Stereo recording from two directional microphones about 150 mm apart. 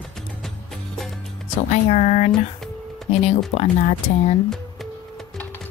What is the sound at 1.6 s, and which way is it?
Speech, 55° left (ahead or behind).